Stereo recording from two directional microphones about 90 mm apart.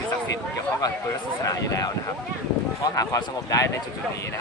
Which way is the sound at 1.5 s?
40° left (ahead or behind).